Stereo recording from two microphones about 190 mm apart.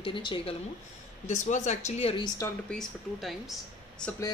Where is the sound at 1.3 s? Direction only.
40° left (ahead or behind).